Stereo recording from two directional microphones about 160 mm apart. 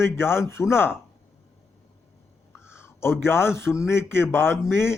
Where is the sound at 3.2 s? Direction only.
15° left (ahead or behind).